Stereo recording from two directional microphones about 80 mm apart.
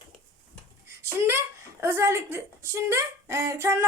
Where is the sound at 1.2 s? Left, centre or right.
Right.